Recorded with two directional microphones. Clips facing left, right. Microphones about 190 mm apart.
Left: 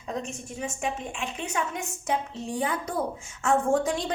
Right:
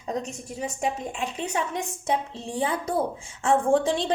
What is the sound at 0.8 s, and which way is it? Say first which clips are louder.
A woman's voice: right 4 dB; 35° right (ahead or behind).